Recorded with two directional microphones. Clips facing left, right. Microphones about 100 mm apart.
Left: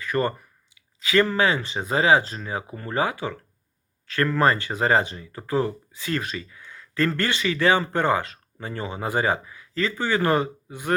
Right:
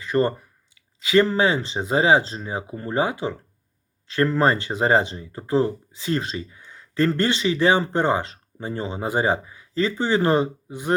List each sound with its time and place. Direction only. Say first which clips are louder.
0.0 s speech: right 3 dB; 25° right (ahead or behind)